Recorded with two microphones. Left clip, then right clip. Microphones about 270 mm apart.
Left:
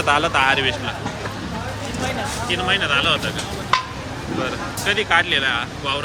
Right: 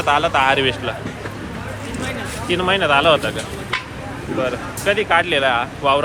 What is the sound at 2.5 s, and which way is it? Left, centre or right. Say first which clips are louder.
Speech: right 4 dB; centre.